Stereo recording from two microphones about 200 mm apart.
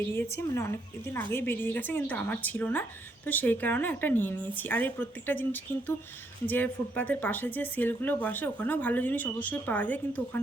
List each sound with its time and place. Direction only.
0.0 s speech: 10° left (ahead or behind)